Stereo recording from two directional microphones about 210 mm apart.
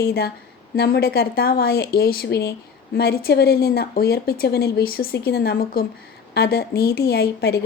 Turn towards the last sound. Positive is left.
turn(degrees=50)  # may be behind; listen again after turning